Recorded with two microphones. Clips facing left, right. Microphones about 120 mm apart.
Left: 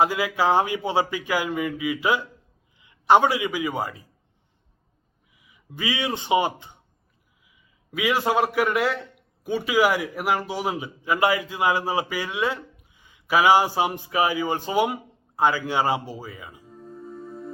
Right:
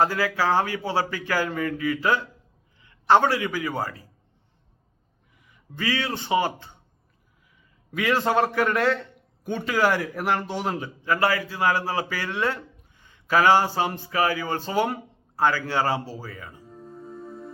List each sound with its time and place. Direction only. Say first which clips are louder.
0.0 s a man's voice: left 1 dB; 15° left (ahead or behind)
5.4 s speech: even; 10° left (ahead or behind)
7.9 s a man's voice: even; 10° left (ahead or behind)